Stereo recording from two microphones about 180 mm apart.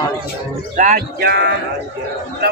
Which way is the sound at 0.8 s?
50° right (ahead or behind).